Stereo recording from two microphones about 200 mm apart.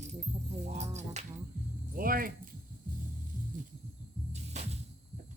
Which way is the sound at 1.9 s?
45° right (ahead or behind).